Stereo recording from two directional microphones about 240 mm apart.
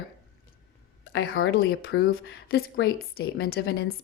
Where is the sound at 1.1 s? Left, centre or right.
Left.